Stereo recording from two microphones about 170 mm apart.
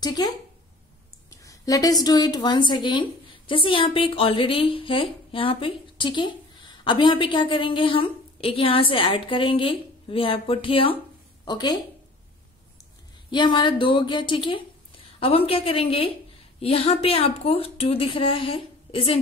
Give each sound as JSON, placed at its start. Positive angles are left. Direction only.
{"t": 0.0, "sound": "speech", "side_deg": 25}
{"t": 1.4, "sound": "a sound", "side_deg": 20}
{"t": 2.0, "sound": "a woman's voice", "side_deg": 25}
{"t": 13.3, "sound": "a woman's voice", "side_deg": 25}